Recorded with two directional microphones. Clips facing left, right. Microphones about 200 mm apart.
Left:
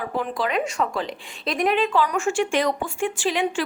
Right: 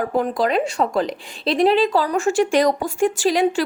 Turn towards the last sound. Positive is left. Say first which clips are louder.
# right 6 dB
turn(degrees=-40)  # may be behind; listen again after turning